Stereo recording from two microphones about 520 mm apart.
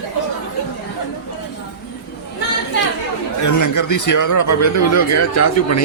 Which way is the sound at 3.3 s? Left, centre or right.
Left.